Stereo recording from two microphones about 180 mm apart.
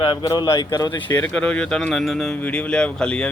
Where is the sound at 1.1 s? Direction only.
10° left (ahead or behind).